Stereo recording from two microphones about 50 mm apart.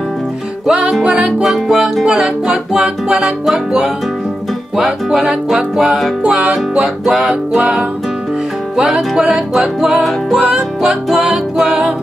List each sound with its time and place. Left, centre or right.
0.7 s music: centre
4.7 s music: centre
6.2 s music: right
7.1 s music: centre
9.3 s music: centre
10.4 s music: centre